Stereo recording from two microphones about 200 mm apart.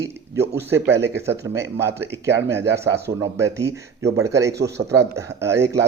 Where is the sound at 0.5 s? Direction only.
10° right (ahead or behind).